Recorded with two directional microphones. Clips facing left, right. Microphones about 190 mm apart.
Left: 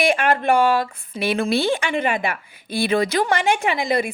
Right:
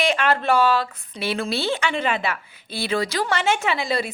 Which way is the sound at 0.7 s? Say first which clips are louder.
Left 2 dB; 15° left (ahead or behind).